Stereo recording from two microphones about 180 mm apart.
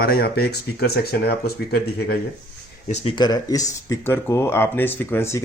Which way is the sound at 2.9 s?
30° left (ahead or behind).